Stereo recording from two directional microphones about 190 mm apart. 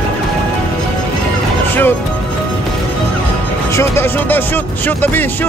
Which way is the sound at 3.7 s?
15° left (ahead or behind).